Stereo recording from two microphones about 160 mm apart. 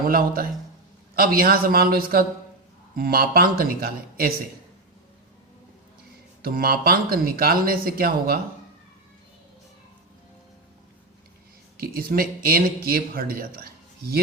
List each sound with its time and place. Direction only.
0.0 s speech: 65° right (ahead or behind)
6.4 s speech: 70° right (ahead or behind)
11.8 s speech: 70° right (ahead or behind)